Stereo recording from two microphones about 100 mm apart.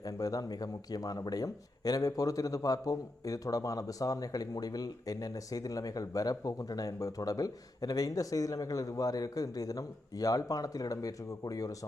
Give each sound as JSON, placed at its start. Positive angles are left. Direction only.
{"t": 0.0, "sound": "speech", "side_deg": 35}